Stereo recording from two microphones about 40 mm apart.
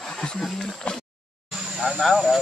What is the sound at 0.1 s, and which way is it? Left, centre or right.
Wild animals, left.